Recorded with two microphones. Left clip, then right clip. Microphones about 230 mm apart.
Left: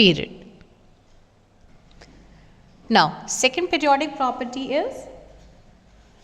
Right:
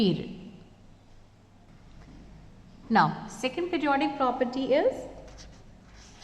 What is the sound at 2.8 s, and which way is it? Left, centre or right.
A woman's voice, left.